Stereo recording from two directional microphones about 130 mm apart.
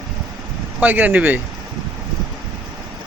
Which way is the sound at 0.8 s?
15° right (ahead or behind).